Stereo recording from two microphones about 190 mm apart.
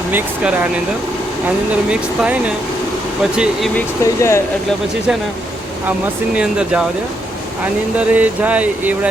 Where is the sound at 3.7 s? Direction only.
15° left (ahead or behind).